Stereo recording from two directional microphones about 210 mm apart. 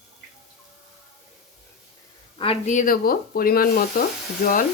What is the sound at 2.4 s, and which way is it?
Speech, 30° left (ahead or behind).